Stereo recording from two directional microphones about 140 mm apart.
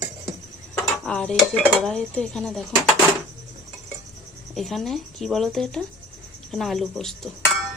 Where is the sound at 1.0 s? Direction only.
5° left (ahead or behind).